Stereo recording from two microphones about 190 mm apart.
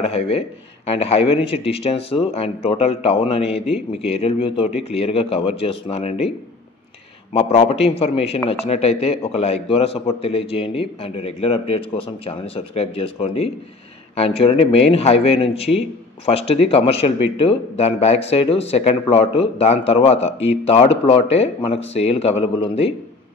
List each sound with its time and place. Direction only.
0.0 s speech: 30° left (ahead or behind)
7.3 s speech: 35° left (ahead or behind)